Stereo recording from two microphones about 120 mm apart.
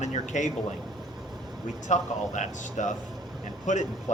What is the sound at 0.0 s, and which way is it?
Speech, 85° left.